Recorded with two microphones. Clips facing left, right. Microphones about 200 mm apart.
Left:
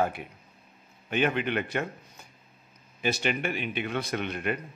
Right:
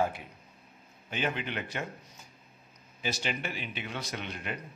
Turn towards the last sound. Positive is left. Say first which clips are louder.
# left 8 dB
turn(degrees=60)  # may be behind; listen again after turning